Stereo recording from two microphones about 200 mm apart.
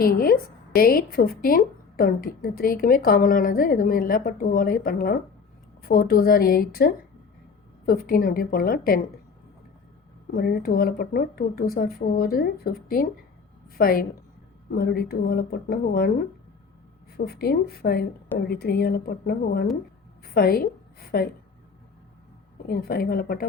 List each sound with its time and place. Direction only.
0.0 s a woman's voice: 45° left (ahead or behind)
10.3 s a woman's voice: 50° left (ahead or behind)
17.2 s a woman's voice: 50° left (ahead or behind)
22.6 s a woman's voice: 50° left (ahead or behind)